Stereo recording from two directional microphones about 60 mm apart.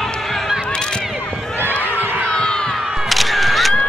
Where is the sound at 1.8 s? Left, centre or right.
Right.